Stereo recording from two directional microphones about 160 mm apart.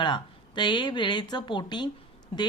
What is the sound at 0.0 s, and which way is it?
Speech, 30° left (ahead or behind).